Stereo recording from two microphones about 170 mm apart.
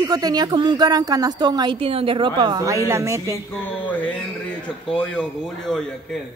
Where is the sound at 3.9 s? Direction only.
10° left (ahead or behind).